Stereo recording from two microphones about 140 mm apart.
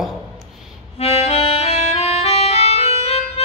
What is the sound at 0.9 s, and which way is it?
Music, 45° left (ahead or behind).